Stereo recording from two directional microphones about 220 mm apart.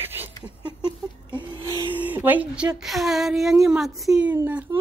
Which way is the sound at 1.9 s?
10° right (ahead or behind).